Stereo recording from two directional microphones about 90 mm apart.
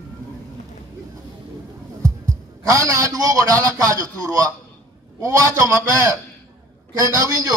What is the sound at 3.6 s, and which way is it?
Music, 40° right (ahead or behind).